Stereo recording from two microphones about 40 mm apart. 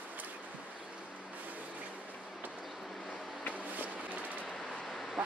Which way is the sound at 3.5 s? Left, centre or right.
Right.